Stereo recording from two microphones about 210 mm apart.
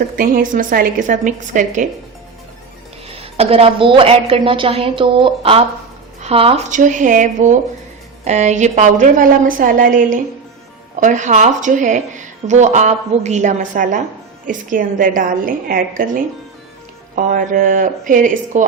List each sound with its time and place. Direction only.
0.2 s a woman's voice: 40° right (ahead or behind)
3.1 s a woman's voice: 25° right (ahead or behind)